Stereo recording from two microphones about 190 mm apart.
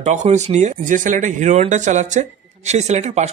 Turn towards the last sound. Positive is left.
turn(degrees=-35)  # may be behind; listen again after turning